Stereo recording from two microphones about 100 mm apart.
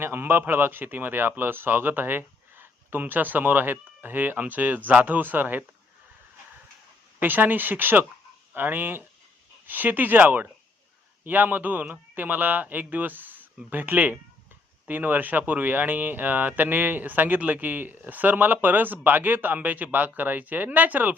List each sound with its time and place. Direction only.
0.0 s speech: 20° right (ahead or behind)
7.2 s speech: 20° right (ahead or behind)